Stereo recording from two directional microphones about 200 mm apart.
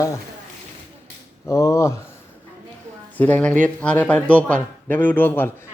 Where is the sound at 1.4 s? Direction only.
15° left (ahead or behind).